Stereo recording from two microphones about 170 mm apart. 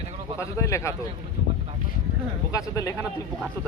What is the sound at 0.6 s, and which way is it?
Speech, 15° left (ahead or behind).